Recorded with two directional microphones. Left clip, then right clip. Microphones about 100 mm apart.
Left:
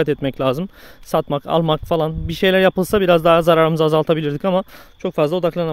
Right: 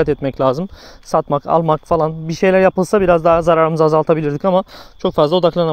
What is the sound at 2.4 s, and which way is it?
Speech, 5° left (ahead or behind).